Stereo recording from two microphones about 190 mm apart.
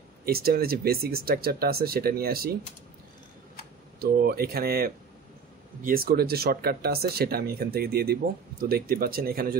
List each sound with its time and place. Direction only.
0.2 s speech: 50° right (ahead or behind)
4.0 s speech: 55° right (ahead or behind)